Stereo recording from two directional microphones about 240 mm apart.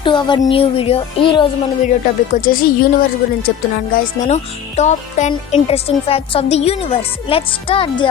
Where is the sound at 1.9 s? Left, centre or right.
Left.